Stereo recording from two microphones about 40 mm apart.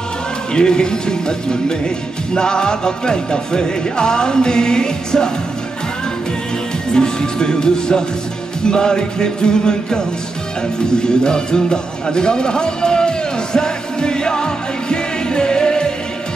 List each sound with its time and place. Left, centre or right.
0.6 s speech: centre
2.3 s music: centre
6.9 s music: centre